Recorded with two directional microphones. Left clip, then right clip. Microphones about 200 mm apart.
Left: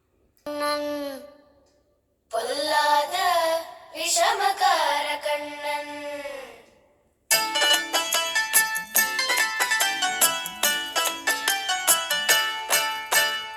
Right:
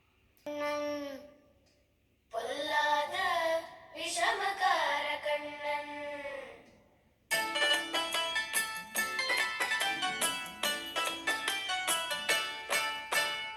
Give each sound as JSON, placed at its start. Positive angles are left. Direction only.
{"t": 0.4, "sound": "a sound", "side_deg": 45}
{"t": 2.3, "sound": "child singing", "side_deg": 50}
{"t": 7.3, "sound": "music", "side_deg": 55}